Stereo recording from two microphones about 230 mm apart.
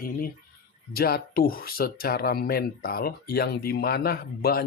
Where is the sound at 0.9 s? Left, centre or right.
Left.